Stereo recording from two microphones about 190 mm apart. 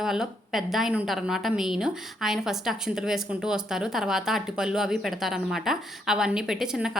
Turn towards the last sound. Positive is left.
turn(degrees=0)  # may be behind; listen again after turning